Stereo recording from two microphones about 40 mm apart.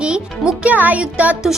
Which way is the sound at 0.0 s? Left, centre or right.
Right.